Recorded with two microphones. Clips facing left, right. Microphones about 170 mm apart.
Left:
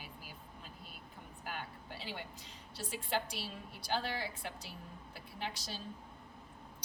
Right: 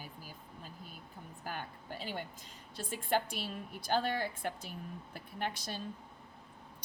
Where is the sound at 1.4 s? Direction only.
45° right (ahead or behind).